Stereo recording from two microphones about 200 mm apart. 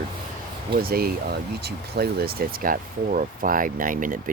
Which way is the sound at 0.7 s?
50° right (ahead or behind).